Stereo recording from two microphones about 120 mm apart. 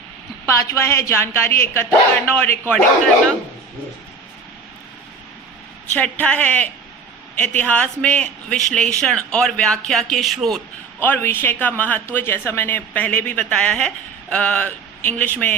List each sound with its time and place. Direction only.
0.4 s speech: 25° left (ahead or behind)
5.9 s a man's voice: 10° left (ahead or behind)
11.0 s speech: 15° left (ahead or behind)